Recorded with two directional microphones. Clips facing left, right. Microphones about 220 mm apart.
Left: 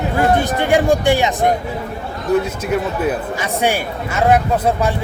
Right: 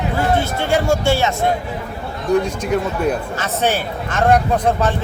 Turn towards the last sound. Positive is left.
turn(degrees=10)  # may be behind; listen again after turning